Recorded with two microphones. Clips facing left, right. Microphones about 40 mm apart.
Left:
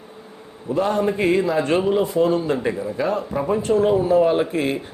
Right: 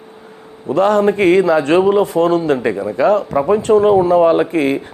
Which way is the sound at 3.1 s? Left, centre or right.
Right.